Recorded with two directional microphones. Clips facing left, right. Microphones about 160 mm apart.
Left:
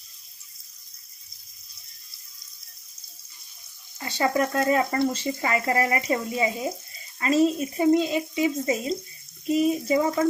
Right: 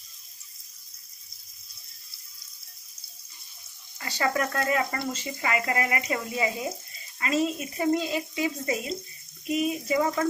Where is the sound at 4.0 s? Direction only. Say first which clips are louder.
Left 4 dB; 25° left (ahead or behind).